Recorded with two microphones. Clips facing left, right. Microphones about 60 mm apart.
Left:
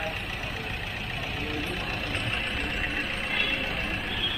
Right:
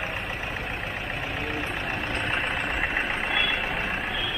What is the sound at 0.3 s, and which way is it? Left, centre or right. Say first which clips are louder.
Vehicle: right 3 dB; right.